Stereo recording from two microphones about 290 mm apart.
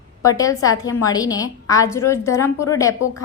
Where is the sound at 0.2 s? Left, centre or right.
Centre.